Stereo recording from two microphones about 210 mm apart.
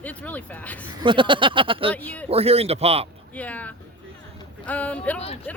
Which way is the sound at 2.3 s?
30° right (ahead or behind).